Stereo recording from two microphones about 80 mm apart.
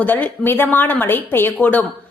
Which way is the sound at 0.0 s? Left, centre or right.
Left.